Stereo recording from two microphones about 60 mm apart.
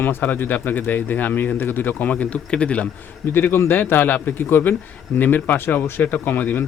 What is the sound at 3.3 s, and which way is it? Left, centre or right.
Speech, left.